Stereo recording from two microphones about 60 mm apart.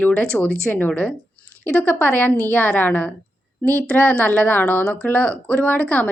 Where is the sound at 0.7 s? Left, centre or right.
Left.